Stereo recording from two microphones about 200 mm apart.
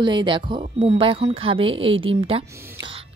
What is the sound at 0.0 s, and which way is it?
A woman's voice, 25° right (ahead or behind).